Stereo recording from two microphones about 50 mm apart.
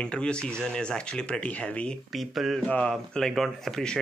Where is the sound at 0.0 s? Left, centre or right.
Centre.